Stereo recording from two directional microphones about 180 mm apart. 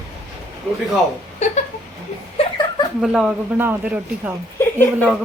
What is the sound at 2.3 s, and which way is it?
Chuckle, 25° left (ahead or behind).